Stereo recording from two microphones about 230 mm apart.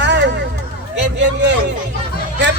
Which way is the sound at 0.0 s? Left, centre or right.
Right.